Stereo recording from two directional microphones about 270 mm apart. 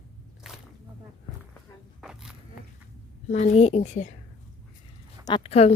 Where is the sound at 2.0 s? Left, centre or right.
Centre.